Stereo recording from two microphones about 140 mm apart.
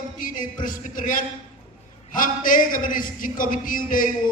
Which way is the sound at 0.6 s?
75° left (ahead or behind).